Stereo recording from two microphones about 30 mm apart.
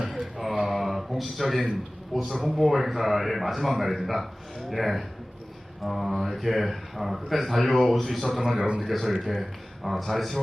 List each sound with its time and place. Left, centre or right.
0.1 s a sound: centre
2.3 s speech: centre
8.5 s a man's voice: right
8.8 s speech: centre